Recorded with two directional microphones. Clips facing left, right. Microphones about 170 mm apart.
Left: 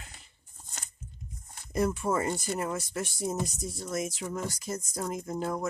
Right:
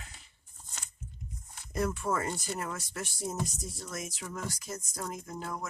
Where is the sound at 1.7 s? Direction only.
15° left (ahead or behind).